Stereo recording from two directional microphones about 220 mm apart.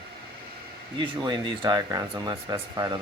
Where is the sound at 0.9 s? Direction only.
20° right (ahead or behind).